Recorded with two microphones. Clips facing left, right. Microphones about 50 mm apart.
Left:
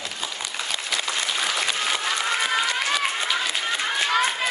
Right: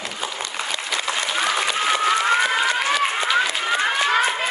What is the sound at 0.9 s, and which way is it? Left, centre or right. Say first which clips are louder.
Applause: right 3 dB; right.